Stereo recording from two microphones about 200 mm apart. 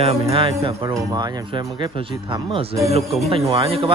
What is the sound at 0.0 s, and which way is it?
Speech, 30° right (ahead or behind).